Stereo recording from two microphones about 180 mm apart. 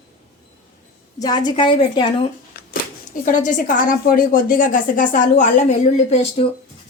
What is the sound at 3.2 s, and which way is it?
A woman's voice, 45° left (ahead or behind).